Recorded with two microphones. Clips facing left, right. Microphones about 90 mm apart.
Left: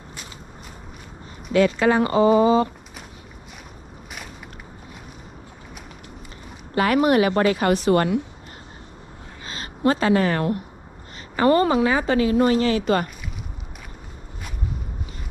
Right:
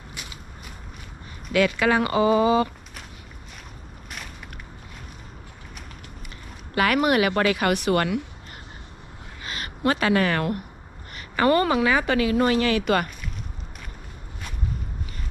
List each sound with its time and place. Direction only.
1.5 s a woman's voice: 75° right (ahead or behind)
6.7 s a woman's voice: 75° right (ahead or behind)
9.4 s a sound: 70° right (ahead or behind)
11.1 s a woman's voice: 65° right (ahead or behind)